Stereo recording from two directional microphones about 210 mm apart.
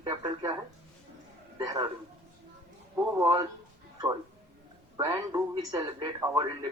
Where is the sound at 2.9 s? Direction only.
15° right (ahead or behind).